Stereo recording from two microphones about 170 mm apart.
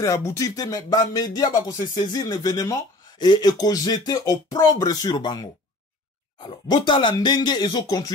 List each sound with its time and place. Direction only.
0.0 s speech: 20° left (ahead or behind)